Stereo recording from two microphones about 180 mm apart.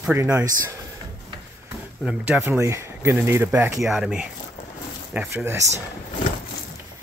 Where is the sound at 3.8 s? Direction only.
Centre (ahead or behind).